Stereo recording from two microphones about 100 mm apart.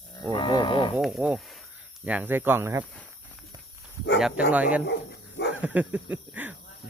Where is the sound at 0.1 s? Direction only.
40° left (ahead or behind).